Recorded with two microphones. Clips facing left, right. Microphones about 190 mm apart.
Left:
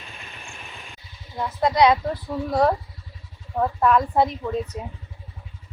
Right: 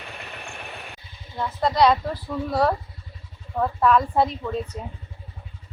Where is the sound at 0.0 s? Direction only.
70° right (ahead or behind).